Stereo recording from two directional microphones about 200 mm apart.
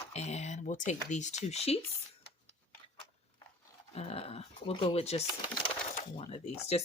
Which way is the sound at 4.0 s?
30° left (ahead or behind).